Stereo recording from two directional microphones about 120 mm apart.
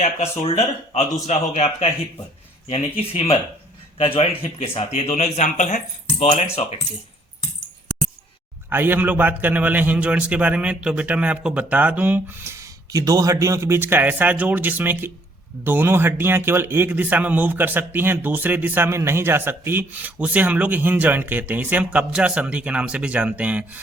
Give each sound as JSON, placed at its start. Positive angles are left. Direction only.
{"t": 0.0, "sound": "speech", "side_deg": 60}
{"t": 2.6, "sound": "speech", "side_deg": 55}
{"t": 4.9, "sound": "speech", "side_deg": 70}
{"t": 8.7, "sound": "a man's voice", "side_deg": -15}